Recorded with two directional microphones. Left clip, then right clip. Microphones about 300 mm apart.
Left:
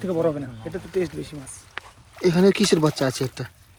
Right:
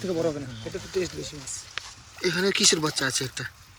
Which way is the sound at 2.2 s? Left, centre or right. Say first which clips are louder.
Left 3 dB; centre.